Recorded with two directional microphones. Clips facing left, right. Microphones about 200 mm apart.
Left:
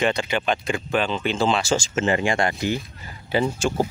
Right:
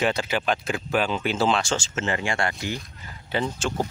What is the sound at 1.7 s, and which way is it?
Speech, 15° left (ahead or behind).